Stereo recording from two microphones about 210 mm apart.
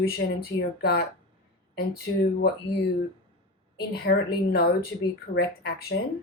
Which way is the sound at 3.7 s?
50° left (ahead or behind).